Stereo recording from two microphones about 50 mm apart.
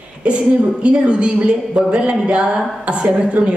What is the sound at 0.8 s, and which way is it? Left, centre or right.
A woman's voice, right.